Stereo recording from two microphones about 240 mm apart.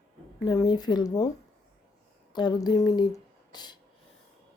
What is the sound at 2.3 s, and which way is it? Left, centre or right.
Speech, centre.